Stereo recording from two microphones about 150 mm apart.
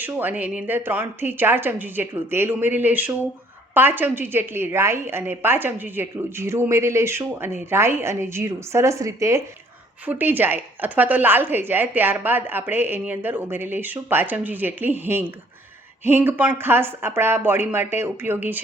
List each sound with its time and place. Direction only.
0.0 s a woman's voice: 10° right (ahead or behind)